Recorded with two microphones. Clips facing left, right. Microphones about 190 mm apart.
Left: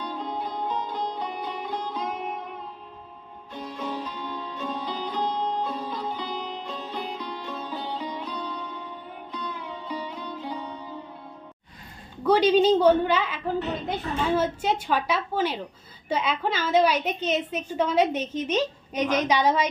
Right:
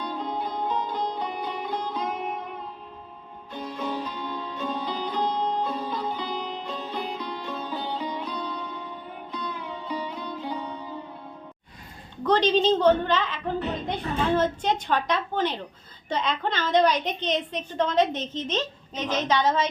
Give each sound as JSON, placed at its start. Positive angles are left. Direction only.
{"t": 0.0, "sound": "music", "side_deg": -65}
{"t": 12.2, "sound": "a woman's voice", "side_deg": 10}